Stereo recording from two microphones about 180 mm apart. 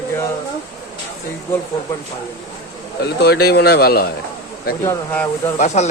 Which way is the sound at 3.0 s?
65° left (ahead or behind).